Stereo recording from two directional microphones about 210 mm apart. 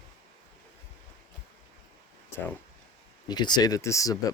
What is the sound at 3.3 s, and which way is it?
Speech, 20° left (ahead or behind).